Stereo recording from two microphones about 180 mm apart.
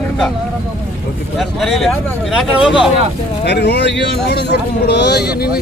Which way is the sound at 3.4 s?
70° left (ahead or behind).